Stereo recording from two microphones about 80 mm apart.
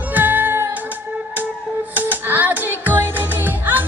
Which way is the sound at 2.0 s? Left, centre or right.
Right.